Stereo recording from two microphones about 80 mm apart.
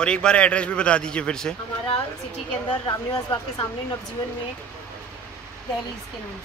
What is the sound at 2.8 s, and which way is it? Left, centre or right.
Speech, left.